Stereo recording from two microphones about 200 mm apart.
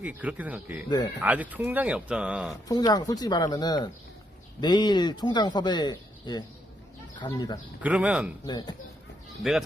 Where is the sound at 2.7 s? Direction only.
20° left (ahead or behind).